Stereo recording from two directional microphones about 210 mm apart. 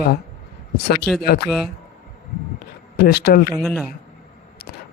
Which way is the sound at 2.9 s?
50° left (ahead or behind).